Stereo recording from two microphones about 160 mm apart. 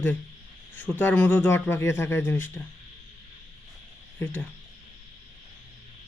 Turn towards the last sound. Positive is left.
turn(degrees=10)  # may be behind; listen again after turning